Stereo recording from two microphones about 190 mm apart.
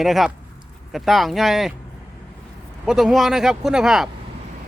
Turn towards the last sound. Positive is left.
turn(degrees=0)  # may be behind; listen again after turning